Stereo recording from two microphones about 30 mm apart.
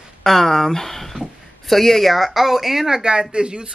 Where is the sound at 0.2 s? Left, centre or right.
Centre.